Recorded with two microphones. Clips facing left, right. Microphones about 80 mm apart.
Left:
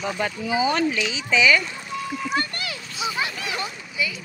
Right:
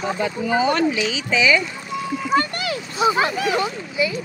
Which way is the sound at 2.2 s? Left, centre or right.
Right.